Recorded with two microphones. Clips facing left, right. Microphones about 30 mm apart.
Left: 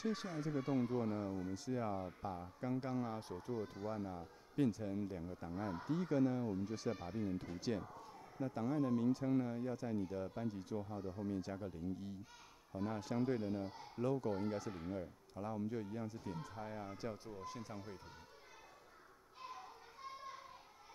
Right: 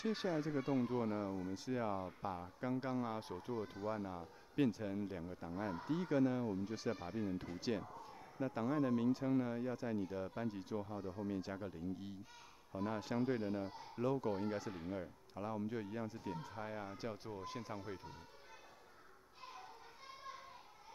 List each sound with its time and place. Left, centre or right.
0.0 s speech: right
0.5 s speech: centre
1.7 s speech: right
11.1 s speech: right